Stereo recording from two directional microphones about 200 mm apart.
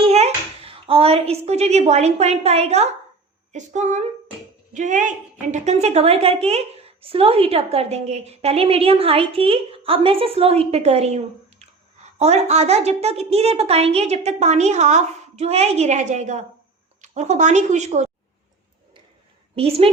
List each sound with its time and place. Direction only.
0.0 s a child's voice: 30° right (ahead or behind)
19.5 s a woman's voice: 30° right (ahead or behind)